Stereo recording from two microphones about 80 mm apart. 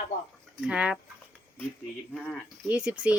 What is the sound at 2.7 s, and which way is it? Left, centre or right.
Speech, centre.